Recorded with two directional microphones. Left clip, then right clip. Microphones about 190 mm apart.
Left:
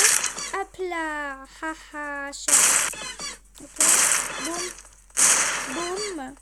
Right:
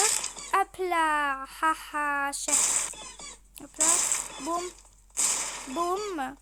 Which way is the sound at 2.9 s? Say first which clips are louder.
Left 9 dB; 45° left (ahead or behind).